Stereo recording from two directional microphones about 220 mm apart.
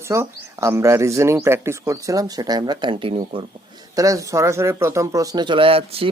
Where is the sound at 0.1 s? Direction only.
10° right (ahead or behind).